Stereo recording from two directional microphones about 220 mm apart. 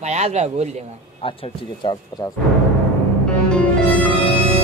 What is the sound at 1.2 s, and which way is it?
Speech, 25° left (ahead or behind).